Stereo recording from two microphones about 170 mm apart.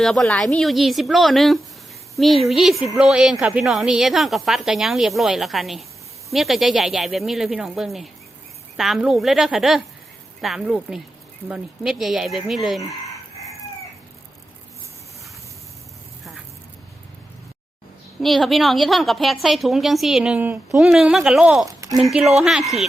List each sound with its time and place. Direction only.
0.0 s a woman's voice: centre (ahead or behind)
18.2 s a woman's voice: centre (ahead or behind)